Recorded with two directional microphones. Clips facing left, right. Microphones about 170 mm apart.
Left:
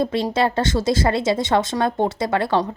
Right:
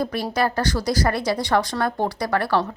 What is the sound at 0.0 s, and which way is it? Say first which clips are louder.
A woman's voice: left 3 dB; 25° left (ahead or behind).